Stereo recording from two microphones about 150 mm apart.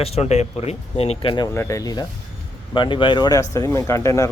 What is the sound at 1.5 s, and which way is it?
Speech, 20° left (ahead or behind).